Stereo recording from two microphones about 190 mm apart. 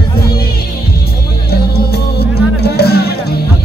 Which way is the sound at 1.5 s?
55° left (ahead or behind).